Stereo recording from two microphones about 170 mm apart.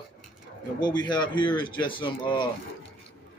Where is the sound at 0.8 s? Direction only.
25° left (ahead or behind).